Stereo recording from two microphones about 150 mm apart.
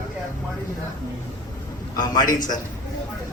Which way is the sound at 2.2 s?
60° left (ahead or behind).